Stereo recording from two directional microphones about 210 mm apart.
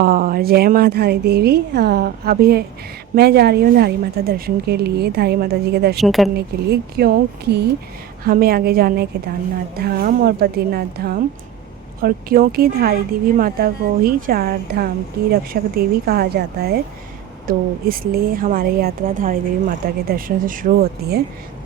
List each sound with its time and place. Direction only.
0.0 s a woman's voice: 45° right (ahead or behind)
6.0 s a woman's voice: centre (ahead or behind)
6.3 s a woman's voice: 50° right (ahead or behind)